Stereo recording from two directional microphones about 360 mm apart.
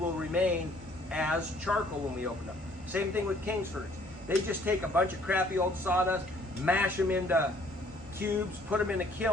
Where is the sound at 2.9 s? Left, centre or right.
Centre.